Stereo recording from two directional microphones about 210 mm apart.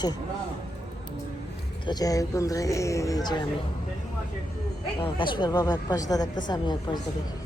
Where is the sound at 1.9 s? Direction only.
15° left (ahead or behind).